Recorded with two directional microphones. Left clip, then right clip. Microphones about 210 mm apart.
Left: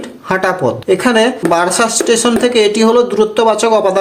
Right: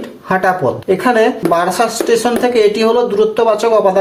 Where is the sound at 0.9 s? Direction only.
45° left (ahead or behind).